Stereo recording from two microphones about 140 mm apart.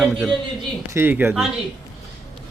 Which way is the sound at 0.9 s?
15° right (ahead or behind).